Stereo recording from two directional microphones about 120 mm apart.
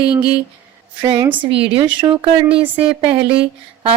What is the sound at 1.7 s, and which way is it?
Speech, 40° right (ahead or behind).